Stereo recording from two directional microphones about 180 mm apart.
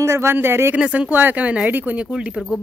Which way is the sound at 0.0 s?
15° right (ahead or behind).